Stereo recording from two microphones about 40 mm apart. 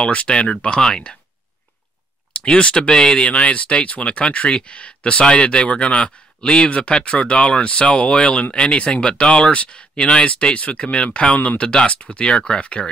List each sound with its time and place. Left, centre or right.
0.0 s speech: left
2.3 s speech: left